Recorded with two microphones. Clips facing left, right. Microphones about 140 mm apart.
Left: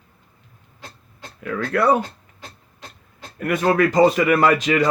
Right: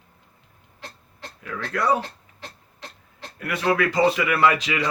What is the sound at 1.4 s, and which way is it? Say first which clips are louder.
Speech: left 5 dB; 55° left (ahead or behind).